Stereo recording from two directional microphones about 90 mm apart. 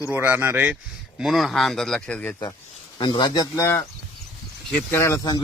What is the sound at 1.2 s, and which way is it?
A man's voice, centre (ahead or behind).